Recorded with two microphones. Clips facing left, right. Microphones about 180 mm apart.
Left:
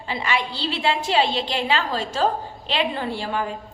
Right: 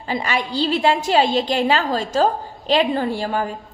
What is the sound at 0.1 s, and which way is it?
A woman's voice, 45° right (ahead or behind).